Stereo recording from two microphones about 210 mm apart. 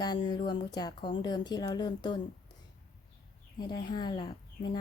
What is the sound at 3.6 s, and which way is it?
Speech, 20° left (ahead or behind).